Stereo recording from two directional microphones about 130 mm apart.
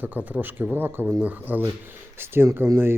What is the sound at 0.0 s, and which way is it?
Speech, 15° right (ahead or behind).